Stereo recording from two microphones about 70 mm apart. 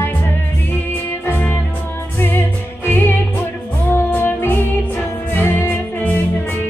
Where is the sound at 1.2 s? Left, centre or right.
Left.